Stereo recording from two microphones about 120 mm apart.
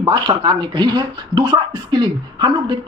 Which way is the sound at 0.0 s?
40° right (ahead or behind).